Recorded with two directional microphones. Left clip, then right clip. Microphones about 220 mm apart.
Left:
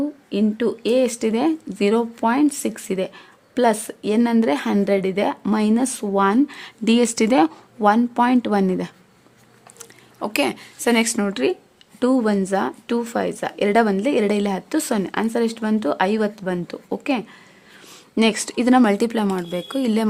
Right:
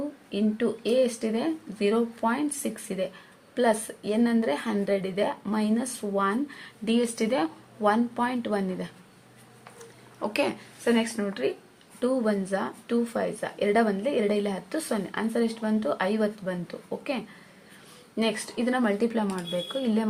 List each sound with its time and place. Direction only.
0.3 s speech: 45° left (ahead or behind)
9.7 s a woman's voice: 35° left (ahead or behind)